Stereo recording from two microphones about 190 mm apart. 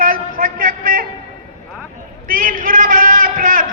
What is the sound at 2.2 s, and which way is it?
A man's voice, 45° right (ahead or behind).